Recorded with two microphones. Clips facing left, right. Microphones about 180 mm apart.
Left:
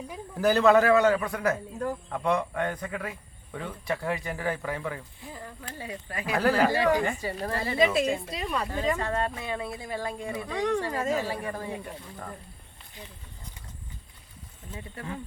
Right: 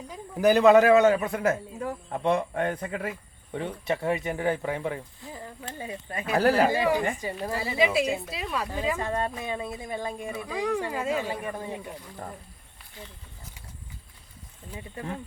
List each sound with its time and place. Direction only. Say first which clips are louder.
0.3 s a man's voice: right 3 dB; 15° right (ahead or behind)
1.7 s speech: left 2 dB; centre (ahead or behind)
2.0 s a man's voice: right 4 dB; 25° right (ahead or behind)
6.8 s speech: left 1 dB; 10° right (ahead or behind)
7.1 s a man's voice: even; 20° right (ahead or behind)
7.4 s speech: left 1 dB; 10° right (ahead or behind)
10.4 s a man's voice: left 1 dB; 5° right (ahead or behind)
14.7 s a man's voice: right 2 dB; 20° right (ahead or behind)